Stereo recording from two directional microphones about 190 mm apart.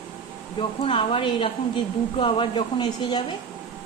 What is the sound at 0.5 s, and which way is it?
Speech, 30° left (ahead or behind).